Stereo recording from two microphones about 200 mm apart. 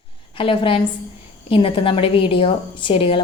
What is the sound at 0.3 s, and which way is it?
A woman's voice, 25° left (ahead or behind).